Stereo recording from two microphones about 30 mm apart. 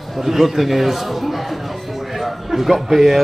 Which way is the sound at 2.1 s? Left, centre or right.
Centre.